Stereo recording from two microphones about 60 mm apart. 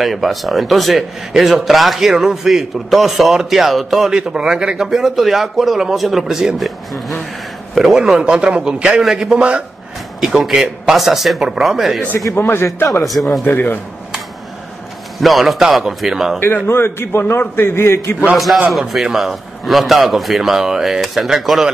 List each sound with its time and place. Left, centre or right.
0.0 s a man's voice: centre
4.1 s a man's voice: centre
7.7 s a man's voice: centre
8.0 s a man's voice: centre
12.4 s a man's voice: left
13.0 s a man's voice: centre
13.4 s a man's voice: left
15.1 s a man's voice: centre
16.6 s a man's voice: left
18.3 s a man's voice: centre